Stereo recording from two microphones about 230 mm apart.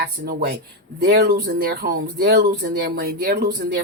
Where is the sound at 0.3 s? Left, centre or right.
Right.